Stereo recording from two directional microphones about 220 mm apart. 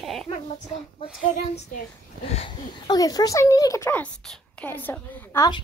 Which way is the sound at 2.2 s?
25° left (ahead or behind).